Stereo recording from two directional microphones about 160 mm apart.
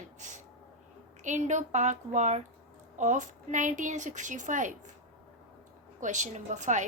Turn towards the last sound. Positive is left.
turn(degrees=-50)  # may be behind; listen again after turning